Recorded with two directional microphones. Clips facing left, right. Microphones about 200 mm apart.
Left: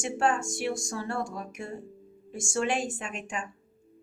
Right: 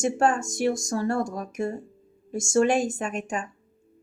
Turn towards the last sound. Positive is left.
turn(degrees=-40)  # may be behind; listen again after turning